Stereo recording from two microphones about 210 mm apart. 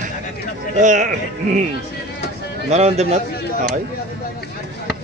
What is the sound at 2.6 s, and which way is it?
Music, 30° right (ahead or behind).